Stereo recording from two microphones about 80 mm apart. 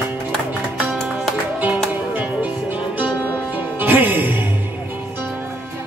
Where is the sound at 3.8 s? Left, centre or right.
Right.